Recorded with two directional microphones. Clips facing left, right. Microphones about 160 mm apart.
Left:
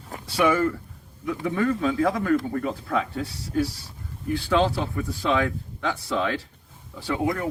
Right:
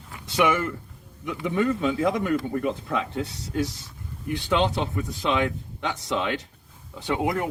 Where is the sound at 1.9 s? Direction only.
20° right (ahead or behind).